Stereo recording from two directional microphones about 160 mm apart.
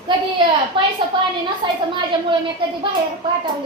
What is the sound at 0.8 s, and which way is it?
A child's voice, 30° right (ahead or behind).